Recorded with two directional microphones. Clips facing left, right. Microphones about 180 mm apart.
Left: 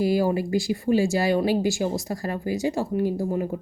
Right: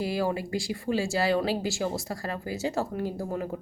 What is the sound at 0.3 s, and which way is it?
A woman's voice, 25° left (ahead or behind).